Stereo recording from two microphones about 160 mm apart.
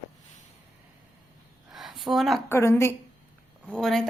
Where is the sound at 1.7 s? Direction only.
Centre (ahead or behind).